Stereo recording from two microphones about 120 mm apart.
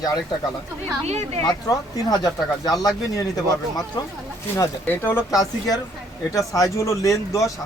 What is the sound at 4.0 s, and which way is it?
Speech, 35° left (ahead or behind).